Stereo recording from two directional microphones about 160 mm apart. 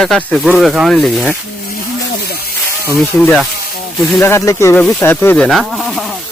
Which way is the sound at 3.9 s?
15° left (ahead or behind).